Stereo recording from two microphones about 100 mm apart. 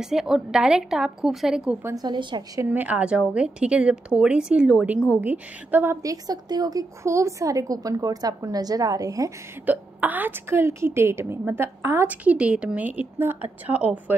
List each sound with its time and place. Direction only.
0.0 s a woman's voice: 5° right (ahead or behind)
2.0 s a woman's voice: 50° right (ahead or behind)
2.6 s a woman's voice: 15° right (ahead or behind)
6.0 s a woman's voice: 40° right (ahead or behind)
9.7 s a woman's voice: 15° right (ahead or behind)
12.1 s a woman's voice: 15° right (ahead or behind)